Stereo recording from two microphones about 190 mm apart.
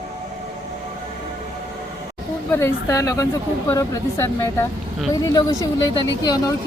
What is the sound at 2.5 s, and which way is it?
A woman's voice, 15° left (ahead or behind).